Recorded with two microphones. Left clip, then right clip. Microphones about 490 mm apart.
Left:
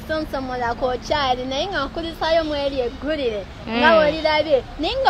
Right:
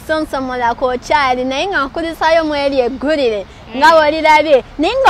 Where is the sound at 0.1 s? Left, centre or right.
Right.